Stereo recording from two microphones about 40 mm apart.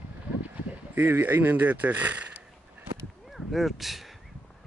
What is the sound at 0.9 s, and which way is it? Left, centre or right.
Speech, right.